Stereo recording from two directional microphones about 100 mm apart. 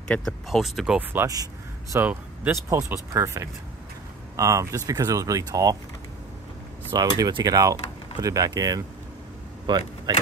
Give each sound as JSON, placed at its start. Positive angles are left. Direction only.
{"t": 0.2, "sound": "speech", "side_deg": 0}
{"t": 1.2, "sound": "a sound", "side_deg": -35}
{"t": 2.0, "sound": "speech", "side_deg": -15}
{"t": 2.5, "sound": "speech", "side_deg": -30}
{"t": 6.9, "sound": "speech", "side_deg": -40}